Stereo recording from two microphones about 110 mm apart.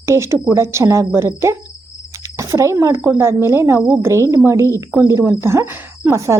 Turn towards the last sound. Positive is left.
turn(degrees=-25)  # may be behind; listen again after turning